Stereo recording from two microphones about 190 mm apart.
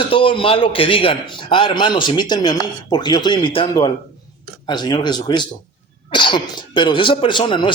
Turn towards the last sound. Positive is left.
turn(degrees=25)  # may be behind; listen again after turning